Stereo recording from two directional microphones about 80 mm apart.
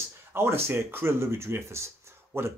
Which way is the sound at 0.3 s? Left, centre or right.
Right.